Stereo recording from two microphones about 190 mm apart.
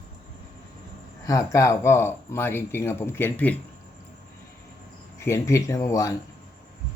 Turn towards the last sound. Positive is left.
turn(degrees=15)  # may be behind; listen again after turning